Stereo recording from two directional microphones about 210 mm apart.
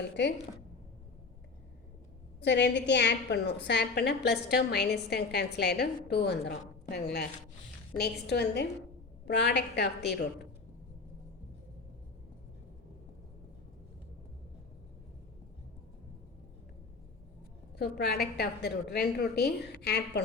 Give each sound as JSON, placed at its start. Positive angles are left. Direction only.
{"t": 0.2, "sound": "a woman's voice", "side_deg": 55}
{"t": 2.4, "sound": "a woman's voice", "side_deg": 55}
{"t": 17.7, "sound": "a woman's voice", "side_deg": 50}